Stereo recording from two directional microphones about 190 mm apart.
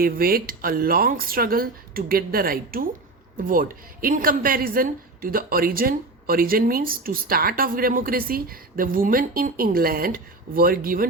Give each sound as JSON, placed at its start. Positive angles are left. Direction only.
{"t": 0.0, "sound": "a woman's voice", "side_deg": -50}